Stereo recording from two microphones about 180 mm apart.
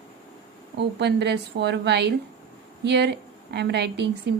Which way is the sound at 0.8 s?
70° right (ahead or behind).